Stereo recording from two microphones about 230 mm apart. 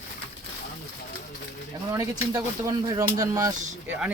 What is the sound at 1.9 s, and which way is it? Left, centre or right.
Speech, centre.